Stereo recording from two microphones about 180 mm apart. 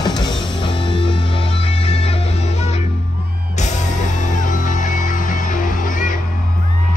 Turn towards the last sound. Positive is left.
turn(degrees=45)  # may be behind; listen again after turning